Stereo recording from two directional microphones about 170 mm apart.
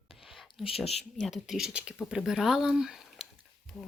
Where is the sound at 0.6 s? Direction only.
35° left (ahead or behind).